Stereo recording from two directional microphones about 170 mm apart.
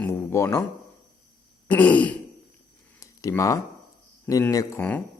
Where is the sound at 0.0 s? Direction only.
15° left (ahead or behind).